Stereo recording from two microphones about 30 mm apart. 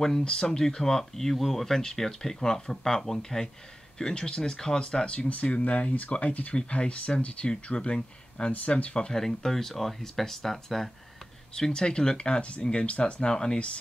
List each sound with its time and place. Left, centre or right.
0.2 s speech: left; by 1.8 s centre
1.8 s speech: centre; by 8.5 s left
8.5 s speech: left
9.1 s speech: centre
11.5 s speech: left
13.0 s speech: left